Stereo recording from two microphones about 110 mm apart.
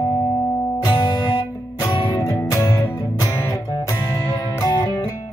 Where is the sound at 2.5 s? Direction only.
30° left (ahead or behind).